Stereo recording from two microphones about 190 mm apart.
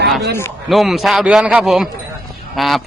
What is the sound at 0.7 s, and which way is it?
Speech, centre (ahead or behind).